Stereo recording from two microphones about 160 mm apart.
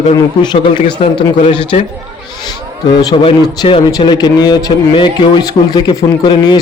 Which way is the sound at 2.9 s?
25° left (ahead or behind).